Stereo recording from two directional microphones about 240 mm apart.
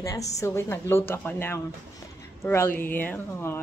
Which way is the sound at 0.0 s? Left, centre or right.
Centre.